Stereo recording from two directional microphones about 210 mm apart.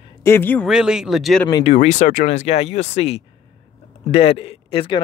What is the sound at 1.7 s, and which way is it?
Speech, 35° left (ahead or behind).